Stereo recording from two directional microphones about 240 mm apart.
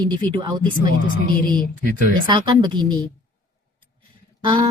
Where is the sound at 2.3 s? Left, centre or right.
Centre.